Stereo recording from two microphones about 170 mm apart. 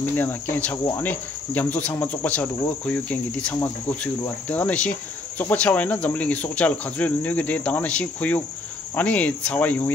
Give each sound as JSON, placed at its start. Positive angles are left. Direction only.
{"t": 0.0, "sound": "cricket", "side_deg": 10}